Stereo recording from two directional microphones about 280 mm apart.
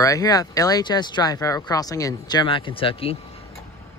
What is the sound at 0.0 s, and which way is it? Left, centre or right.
Speech, centre.